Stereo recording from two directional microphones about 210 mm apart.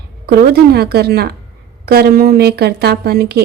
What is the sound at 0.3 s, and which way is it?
A woman's voice, 50° right (ahead or behind).